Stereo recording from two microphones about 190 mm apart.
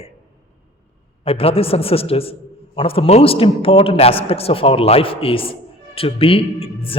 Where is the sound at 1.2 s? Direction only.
30° left (ahead or behind).